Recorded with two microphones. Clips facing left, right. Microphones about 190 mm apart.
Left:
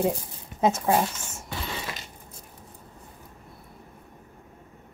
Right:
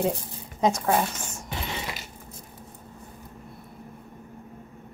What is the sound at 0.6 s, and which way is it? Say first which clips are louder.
Speech: left 1 dB; 5° left (ahead or behind).